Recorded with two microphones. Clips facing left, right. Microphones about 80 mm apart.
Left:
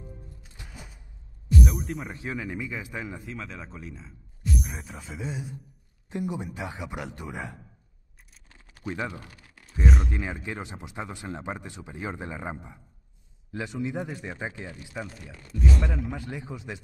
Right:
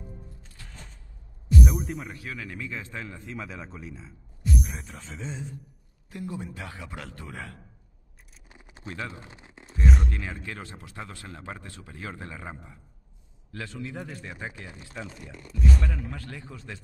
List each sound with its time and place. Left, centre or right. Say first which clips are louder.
0.5 s a sound: left 2 dB; centre
1.6 s speech: right 1 dB; centre
2.1 s speech: left 4 dB; left
3.3 s speech: right 1 dB; centre
8.5 s a sound: right 5 dB; centre
8.8 s speech: left 4 dB; left
9.1 s a sound: left 1 dB; right
9.8 s speech: left 1 dB; centre
10.1 s speech: left 3 dB; centre